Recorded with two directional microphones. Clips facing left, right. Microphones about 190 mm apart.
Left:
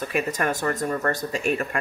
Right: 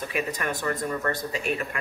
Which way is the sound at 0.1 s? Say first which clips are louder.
Left 5 dB; 45° left (ahead or behind).